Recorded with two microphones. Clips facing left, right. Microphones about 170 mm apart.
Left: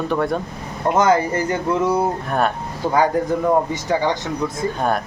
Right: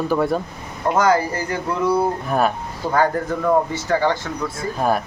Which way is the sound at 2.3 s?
Centre (ahead or behind).